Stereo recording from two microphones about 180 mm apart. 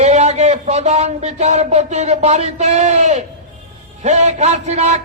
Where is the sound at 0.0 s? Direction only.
40° right (ahead or behind).